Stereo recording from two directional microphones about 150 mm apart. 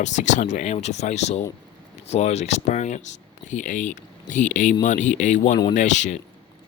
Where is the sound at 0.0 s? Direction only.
50° left (ahead or behind).